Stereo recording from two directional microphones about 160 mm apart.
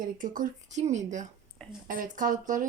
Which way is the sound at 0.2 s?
50° right (ahead or behind).